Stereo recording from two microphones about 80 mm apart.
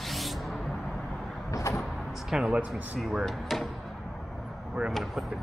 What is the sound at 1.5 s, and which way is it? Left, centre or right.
Vehicle, left.